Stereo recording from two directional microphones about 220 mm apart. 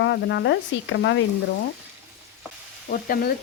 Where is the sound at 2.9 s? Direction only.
40° left (ahead or behind).